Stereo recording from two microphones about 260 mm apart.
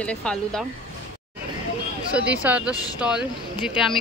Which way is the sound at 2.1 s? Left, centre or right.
Centre.